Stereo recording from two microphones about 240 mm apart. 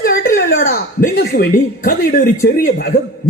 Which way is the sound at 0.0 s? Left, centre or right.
Left.